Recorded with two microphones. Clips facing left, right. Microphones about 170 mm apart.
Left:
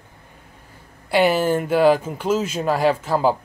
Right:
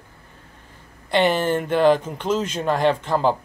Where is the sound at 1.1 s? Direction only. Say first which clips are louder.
Left 2 dB; 5° left (ahead or behind).